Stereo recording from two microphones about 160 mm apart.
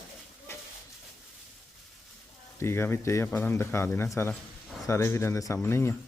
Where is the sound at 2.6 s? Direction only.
15° left (ahead or behind).